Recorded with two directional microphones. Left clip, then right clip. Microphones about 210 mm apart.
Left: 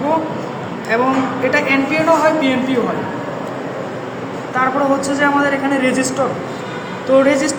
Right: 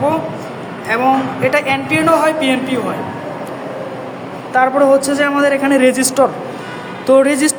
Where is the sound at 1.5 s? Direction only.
60° right (ahead or behind).